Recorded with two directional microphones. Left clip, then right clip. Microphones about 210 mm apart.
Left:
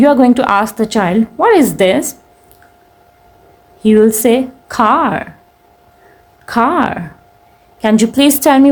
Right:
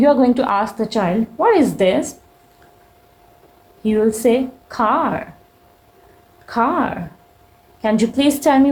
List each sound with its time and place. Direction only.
0.0 s a woman's voice: 35° left (ahead or behind)
3.8 s a woman's voice: 40° left (ahead or behind)
6.4 s a woman's voice: 45° left (ahead or behind)